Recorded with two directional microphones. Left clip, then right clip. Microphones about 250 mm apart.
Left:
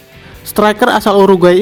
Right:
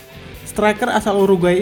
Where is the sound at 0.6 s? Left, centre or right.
Left.